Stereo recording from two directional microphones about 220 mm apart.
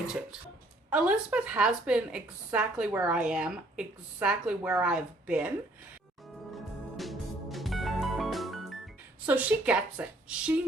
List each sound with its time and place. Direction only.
0.9 s a woman's voice: 5° right (ahead or behind)
6.9 s music: centre (ahead or behind)
9.2 s a woman's voice: 5° right (ahead or behind)